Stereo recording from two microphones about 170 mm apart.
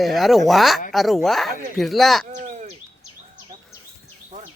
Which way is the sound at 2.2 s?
50° right (ahead or behind).